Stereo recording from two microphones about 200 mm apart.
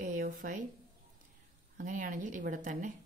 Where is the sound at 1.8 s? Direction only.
40° right (ahead or behind).